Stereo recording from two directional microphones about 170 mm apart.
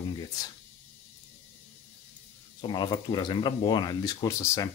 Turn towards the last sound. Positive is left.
turn(degrees=20)  # may be behind; listen again after turning